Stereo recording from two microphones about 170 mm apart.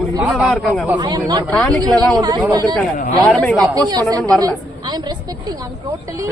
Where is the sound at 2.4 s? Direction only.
20° right (ahead or behind).